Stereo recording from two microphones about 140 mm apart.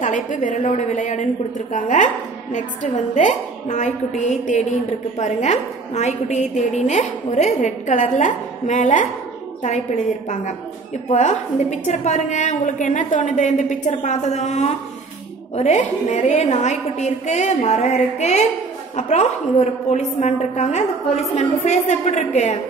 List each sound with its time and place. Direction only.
0.0 s a woman's voice: 65° left (ahead or behind)
11.1 s a woman's voice: 55° left (ahead or behind)